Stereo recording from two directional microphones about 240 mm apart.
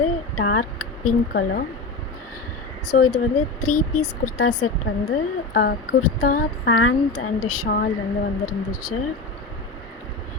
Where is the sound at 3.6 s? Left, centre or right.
Left.